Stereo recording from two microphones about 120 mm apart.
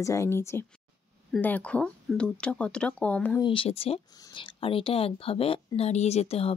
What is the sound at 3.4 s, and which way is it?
Speech, 45° left (ahead or behind).